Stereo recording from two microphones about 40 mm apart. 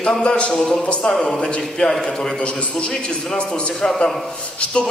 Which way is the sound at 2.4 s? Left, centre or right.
Left.